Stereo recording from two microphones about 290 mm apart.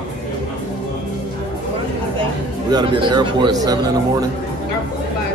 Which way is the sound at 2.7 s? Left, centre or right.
Centre.